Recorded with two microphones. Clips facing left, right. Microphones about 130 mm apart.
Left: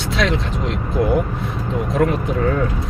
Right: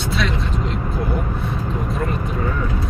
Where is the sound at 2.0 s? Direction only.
75° left (ahead or behind).